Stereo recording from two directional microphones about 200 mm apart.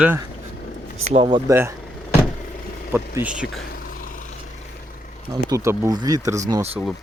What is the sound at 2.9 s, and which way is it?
Speech, 10° right (ahead or behind).